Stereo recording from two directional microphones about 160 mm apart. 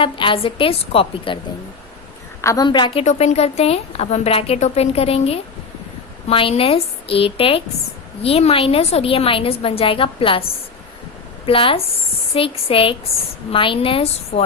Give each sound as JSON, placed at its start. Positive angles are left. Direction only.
{"t": 0.0, "sound": "a woman's voice", "side_deg": 35}
{"t": 2.4, "sound": "a woman's voice", "side_deg": 20}
{"t": 2.6, "sound": "a woman's voice", "side_deg": 30}
{"t": 3.0, "sound": "a woman's voice", "side_deg": 45}
{"t": 11.4, "sound": "a woman's voice", "side_deg": 35}